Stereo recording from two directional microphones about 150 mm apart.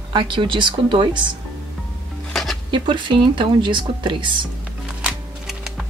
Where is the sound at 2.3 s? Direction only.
Centre (ahead or behind).